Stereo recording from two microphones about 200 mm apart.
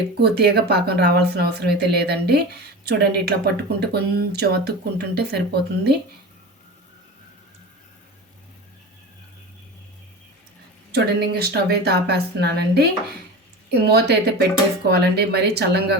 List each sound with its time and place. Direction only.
0.2 s speech: 55° right (ahead or behind)
10.9 s speech: 55° right (ahead or behind)